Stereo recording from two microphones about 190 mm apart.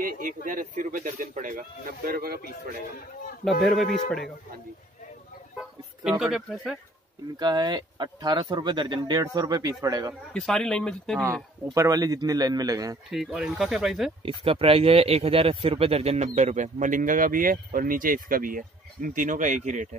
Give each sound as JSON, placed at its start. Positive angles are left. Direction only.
{"t": 0.0, "sound": "speech", "side_deg": -45}
{"t": 3.6, "sound": "speech", "side_deg": 0}
{"t": 5.6, "sound": "speech", "side_deg": 0}
{"t": 7.3, "sound": "speech", "side_deg": -20}
{"t": 10.3, "sound": "speech", "side_deg": 5}
{"t": 11.6, "sound": "speech", "side_deg": -15}
{"t": 13.1, "sound": "speech", "side_deg": 0}
{"t": 14.2, "sound": "speech", "side_deg": -30}